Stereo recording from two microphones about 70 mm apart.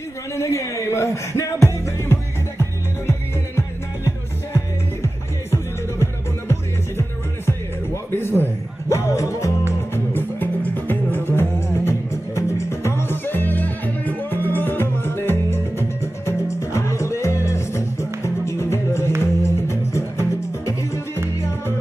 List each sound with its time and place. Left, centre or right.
0.4 s speech: left
2.6 s music: left
8.8 s music: left
9.9 s music: left